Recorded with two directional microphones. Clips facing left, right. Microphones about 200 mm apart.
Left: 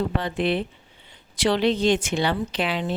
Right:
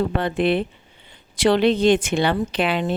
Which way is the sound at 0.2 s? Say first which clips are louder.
Right 4 dB; 55° right (ahead or behind).